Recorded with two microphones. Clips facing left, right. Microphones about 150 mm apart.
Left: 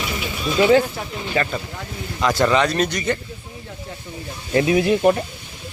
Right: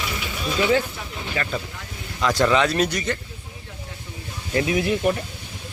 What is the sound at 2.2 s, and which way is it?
Speech, centre (ahead or behind).